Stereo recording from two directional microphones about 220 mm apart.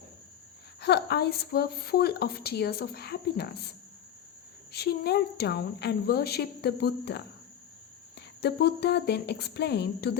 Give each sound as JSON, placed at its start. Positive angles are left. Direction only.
{"t": 0.8, "sound": "speech", "side_deg": 50}
{"t": 4.7, "sound": "speech", "side_deg": 45}
{"t": 8.4, "sound": "speech", "side_deg": 50}